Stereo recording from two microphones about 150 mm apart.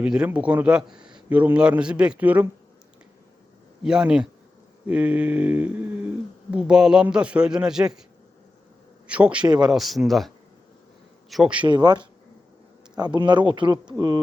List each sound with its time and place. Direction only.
0.0 s a man's voice: 5° right (ahead or behind)
3.8 s a man's voice: 5° right (ahead or behind)
9.0 s a man's voice: 10° right (ahead or behind)
11.6 s speech: 30° right (ahead or behind)
13.1 s speech: 30° right (ahead or behind)